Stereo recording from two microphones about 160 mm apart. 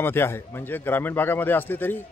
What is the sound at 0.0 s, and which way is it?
A man's voice, 15° left (ahead or behind).